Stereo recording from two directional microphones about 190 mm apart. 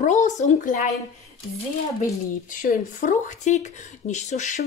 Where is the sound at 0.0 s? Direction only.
40° left (ahead or behind).